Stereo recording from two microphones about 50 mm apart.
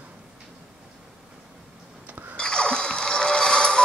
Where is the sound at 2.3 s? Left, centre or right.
Centre.